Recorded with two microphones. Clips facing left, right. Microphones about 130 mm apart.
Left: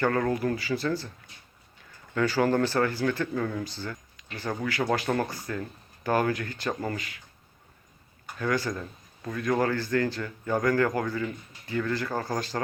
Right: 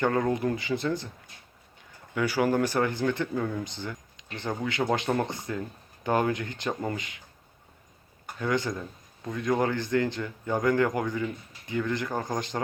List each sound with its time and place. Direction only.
0.0 s speech: 20° right (ahead or behind)
2.1 s speech: 10° right (ahead or behind)
8.4 s speech: 20° right (ahead or behind)